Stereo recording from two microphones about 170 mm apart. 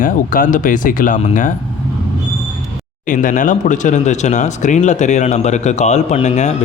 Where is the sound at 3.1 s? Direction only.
50° left (ahead or behind).